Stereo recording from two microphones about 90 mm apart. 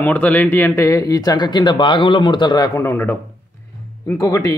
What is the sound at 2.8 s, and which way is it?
Speech, 25° left (ahead or behind).